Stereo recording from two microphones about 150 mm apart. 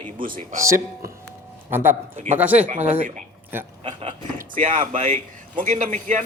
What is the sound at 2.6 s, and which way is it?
Speech, 55° right (ahead or behind).